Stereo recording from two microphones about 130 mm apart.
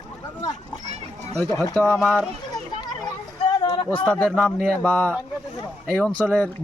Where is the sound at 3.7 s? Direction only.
45° left (ahead or behind).